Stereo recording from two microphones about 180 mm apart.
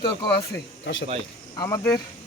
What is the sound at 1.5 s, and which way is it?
Speech, 20° left (ahead or behind).